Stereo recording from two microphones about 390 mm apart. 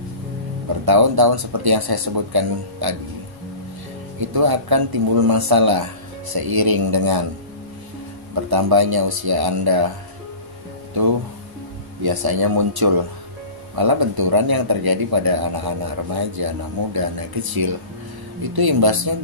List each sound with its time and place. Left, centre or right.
0.8 s speech: right
4.2 s a man's voice: right
8.5 s speech: right
12.0 s a man's voice: right